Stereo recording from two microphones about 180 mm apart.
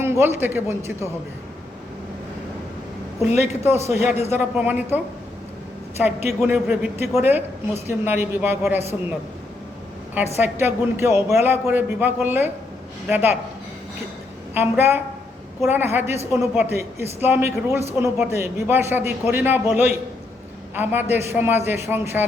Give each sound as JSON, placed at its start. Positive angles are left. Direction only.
{"t": 0.0, "sound": "a woman's voice", "side_deg": -15}
{"t": 3.8, "sound": "a man's voice", "side_deg": 35}
{"t": 4.4, "sound": "a woman's voice", "side_deg": -10}
{"t": 6.0, "sound": "a woman's voice", "side_deg": -10}
{"t": 10.3, "sound": "a woman's voice", "side_deg": -10}
{"t": 14.5, "sound": "a woman's voice", "side_deg": -10}